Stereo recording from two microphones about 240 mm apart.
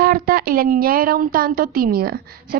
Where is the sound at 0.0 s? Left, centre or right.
Right.